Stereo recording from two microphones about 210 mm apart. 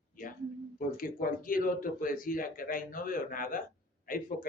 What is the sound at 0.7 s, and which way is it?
Speech, 40° left (ahead or behind).